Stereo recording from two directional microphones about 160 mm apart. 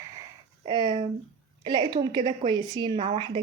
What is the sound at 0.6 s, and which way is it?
A woman's voice, 25° right (ahead or behind).